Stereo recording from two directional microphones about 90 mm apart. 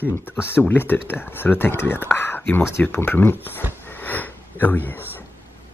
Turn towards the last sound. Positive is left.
turn(degrees=20)  # may be behind; listen again after turning